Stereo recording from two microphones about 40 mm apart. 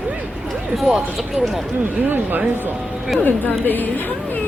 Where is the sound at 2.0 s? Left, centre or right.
Right.